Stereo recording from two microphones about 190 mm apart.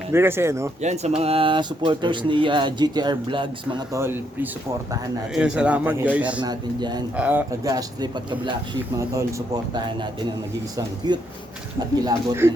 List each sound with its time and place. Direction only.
0.1 s speech: 10° right (ahead or behind)
0.8 s speech: 35° right (ahead or behind); by 4.2 s 15° right (ahead or behind)
5.3 s speech: 5° right (ahead or behind)
6.4 s speech: 20° right (ahead or behind)
7.2 s speech: 10° right (ahead or behind)
10.8 s speech: 20° right (ahead or behind)